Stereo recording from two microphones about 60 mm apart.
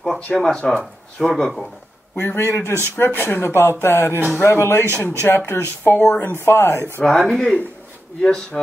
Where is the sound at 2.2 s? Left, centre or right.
Left.